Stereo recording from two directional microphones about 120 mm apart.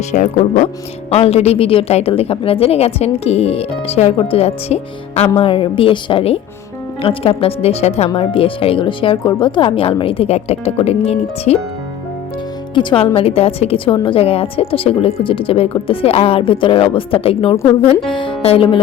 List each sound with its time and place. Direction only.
0.1 s speech: 90° left
1.1 s a woman's voice: 60° left (ahead or behind)
5.4 s a woman's voice: 45° left (ahead or behind); by 8.1 s 65° left (ahead or behind)
8.1 s a woman's voice: 50° left (ahead or behind)
12.7 s a woman's voice: 45° left (ahead or behind)
13.1 s a woman's voice: 55° left (ahead or behind)